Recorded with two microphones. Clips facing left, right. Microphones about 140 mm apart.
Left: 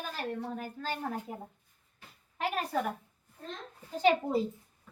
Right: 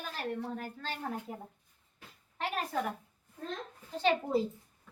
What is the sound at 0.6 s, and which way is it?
Speech, 5° left (ahead or behind).